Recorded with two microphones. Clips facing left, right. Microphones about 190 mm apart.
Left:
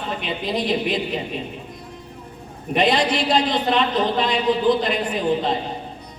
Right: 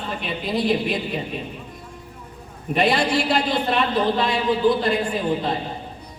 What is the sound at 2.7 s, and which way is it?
A man's voice, 20° left (ahead or behind).